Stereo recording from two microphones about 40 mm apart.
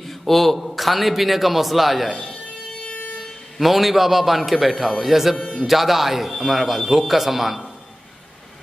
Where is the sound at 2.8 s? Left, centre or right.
Left.